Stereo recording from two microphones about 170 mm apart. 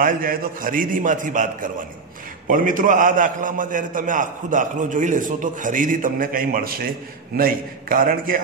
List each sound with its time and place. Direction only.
0.0 s a man's voice: 55° right (ahead or behind)